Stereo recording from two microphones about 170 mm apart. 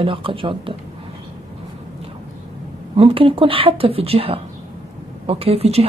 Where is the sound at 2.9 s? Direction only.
30° right (ahead or behind).